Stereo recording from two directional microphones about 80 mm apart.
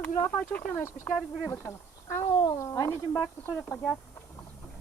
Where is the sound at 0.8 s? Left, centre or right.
Left.